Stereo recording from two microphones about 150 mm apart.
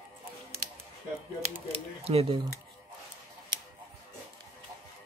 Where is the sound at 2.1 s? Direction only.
40° right (ahead or behind).